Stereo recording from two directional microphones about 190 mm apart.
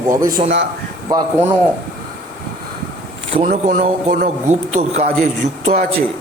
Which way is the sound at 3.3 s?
35° right (ahead or behind).